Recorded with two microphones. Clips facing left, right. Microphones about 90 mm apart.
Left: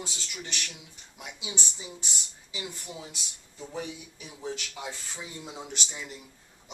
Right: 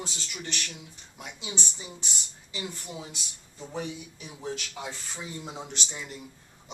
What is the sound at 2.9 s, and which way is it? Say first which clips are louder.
Speech: right 2 dB; 5° right (ahead or behind).